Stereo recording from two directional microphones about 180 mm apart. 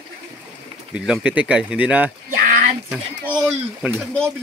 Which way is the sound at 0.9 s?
5° right (ahead or behind).